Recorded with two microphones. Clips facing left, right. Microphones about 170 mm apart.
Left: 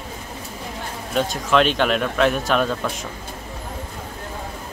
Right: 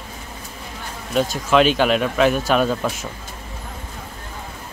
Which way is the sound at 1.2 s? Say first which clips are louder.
Right 2 dB; centre (ahead or behind).